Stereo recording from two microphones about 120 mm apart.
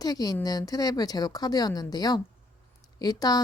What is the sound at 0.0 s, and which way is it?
Speech, 30° left (ahead or behind).